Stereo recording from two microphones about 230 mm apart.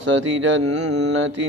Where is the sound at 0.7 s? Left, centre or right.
Right.